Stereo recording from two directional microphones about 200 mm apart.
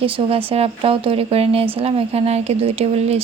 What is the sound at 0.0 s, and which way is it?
A woman's voice, 30° right (ahead or behind).